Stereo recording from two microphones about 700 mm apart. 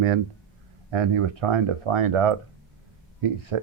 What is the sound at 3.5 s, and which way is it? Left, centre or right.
Speech, right.